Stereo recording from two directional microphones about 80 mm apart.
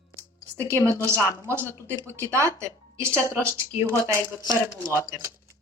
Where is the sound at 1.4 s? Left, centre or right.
Right.